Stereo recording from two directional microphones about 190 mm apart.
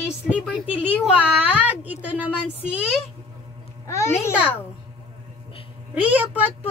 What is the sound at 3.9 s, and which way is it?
Speech, 15° left (ahead or behind).